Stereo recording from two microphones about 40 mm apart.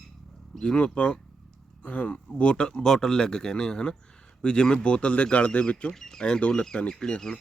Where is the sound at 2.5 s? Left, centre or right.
Left.